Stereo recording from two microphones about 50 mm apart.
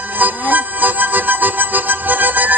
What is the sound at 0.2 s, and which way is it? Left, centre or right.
Music, right.